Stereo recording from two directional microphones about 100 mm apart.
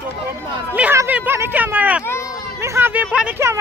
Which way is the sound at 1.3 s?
20° right (ahead or behind).